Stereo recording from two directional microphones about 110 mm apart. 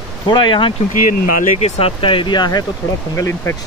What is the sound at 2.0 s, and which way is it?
Speech, 50° left (ahead or behind).